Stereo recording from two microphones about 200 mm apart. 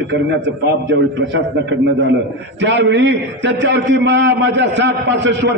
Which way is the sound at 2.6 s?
60° right (ahead or behind).